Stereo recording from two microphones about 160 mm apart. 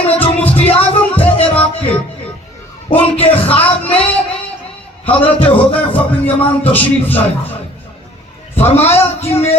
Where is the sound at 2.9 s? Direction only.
35° left (ahead or behind).